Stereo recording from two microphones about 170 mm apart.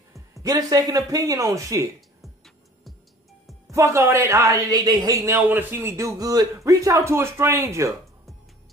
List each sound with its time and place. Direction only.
0.1 s speech: 20° right (ahead or behind)
2.0 s music: centre (ahead or behind)
3.7 s a man's voice: 15° right (ahead or behind)